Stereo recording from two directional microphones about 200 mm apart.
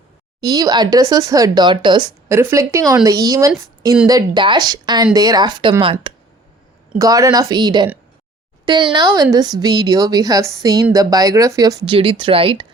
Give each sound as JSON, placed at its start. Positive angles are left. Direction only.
{"t": 0.4, "sound": "a woman's voice", "side_deg": -20}
{"t": 2.3, "sound": "a woman's voice", "side_deg": -15}